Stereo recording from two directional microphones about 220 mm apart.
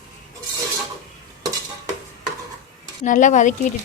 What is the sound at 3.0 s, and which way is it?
Speech, 35° left (ahead or behind).